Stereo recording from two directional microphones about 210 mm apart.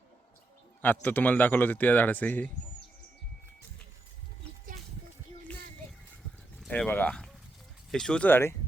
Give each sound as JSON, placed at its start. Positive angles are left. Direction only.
{"t": 0.8, "sound": "speech", "side_deg": 10}
{"t": 6.6, "sound": "speech", "side_deg": 5}